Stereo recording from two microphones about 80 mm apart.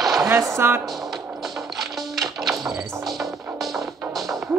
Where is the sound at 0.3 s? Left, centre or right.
Right.